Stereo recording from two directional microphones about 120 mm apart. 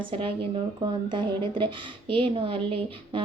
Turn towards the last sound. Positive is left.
turn(degrees=-50)  # may be behind; listen again after turning